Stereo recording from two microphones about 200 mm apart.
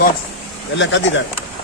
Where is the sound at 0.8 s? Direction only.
65° left (ahead or behind).